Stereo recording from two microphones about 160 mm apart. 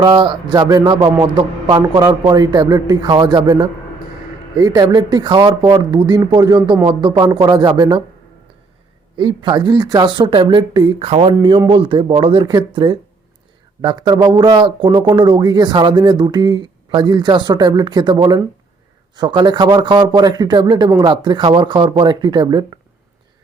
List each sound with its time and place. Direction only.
0.0 s speech: 30° right (ahead or behind)
9.1 s speech: 30° right (ahead or behind)
11.0 s speech: 40° right (ahead or behind)